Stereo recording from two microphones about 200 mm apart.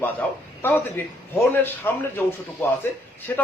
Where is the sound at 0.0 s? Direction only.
10° left (ahead or behind).